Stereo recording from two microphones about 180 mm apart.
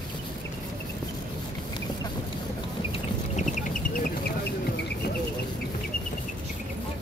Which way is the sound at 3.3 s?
45° left (ahead or behind).